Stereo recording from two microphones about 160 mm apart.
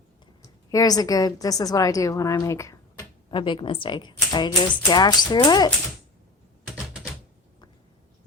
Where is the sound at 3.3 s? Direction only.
30° left (ahead or behind).